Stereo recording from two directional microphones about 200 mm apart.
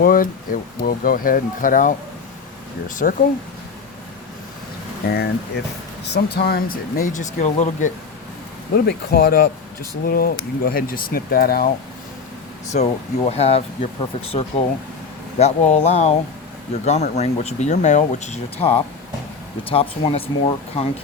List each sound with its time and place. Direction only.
0.0 s speech: 45° left (ahead or behind)
3.0 s speech: 40° left (ahead or behind)
5.0 s speech: 50° left (ahead or behind); by 7.9 s 35° left (ahead or behind)
8.7 s speech: 50° left (ahead or behind)
12.7 s speech: 30° left (ahead or behind)